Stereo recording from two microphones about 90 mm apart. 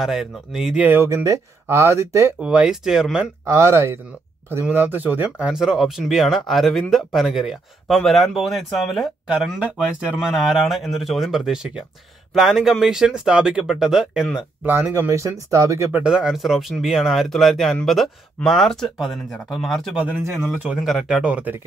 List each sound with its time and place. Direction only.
0.0 s speech: 5° right (ahead or behind)
1.0 s speech: 35° right (ahead or behind)
2.4 s speech: 10° right (ahead or behind)
3.4 s speech: 30° right (ahead or behind)
5.5 s speech: 5° right (ahead or behind)
10.1 s speech: 5° right (ahead or behind)
14.6 s speech: 25° right (ahead or behind)
14.9 s speech: 35° right (ahead or behind)
15.9 s speech: 10° right (ahead or behind)
20.0 s speech: 15° right (ahead or behind)
20.8 s speech: 5° right (ahead or behind)